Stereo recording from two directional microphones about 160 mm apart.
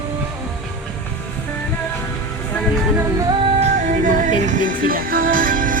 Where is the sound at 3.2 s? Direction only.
35° right (ahead or behind); by 5.8 s 60° right (ahead or behind).